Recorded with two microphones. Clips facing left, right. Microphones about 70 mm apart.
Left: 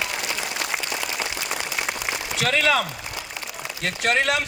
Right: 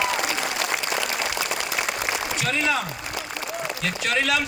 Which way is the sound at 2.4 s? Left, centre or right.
Left.